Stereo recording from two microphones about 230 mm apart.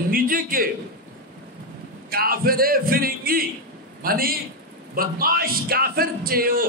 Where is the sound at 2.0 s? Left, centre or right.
Right.